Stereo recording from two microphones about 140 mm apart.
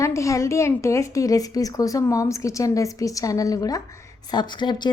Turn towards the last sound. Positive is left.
turn(degrees=30)  # may be behind; listen again after turning